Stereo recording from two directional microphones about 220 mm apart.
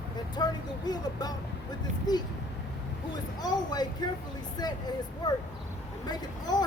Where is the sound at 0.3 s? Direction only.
20° left (ahead or behind).